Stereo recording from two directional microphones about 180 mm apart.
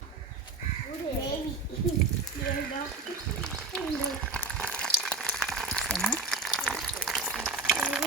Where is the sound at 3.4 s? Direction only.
5° left (ahead or behind).